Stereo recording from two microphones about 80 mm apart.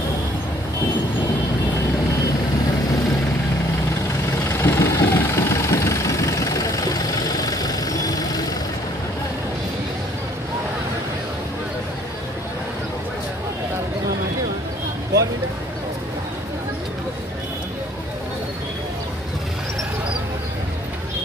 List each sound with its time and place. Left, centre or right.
4.5 s vehicle: left